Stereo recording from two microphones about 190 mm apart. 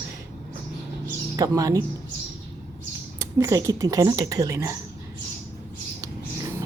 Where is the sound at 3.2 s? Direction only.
15° right (ahead or behind).